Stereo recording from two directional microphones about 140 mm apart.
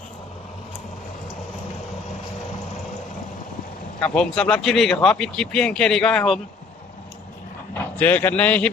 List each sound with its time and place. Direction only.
4.0 s speech: 5° left (ahead or behind)
7.7 s speech: 10° left (ahead or behind)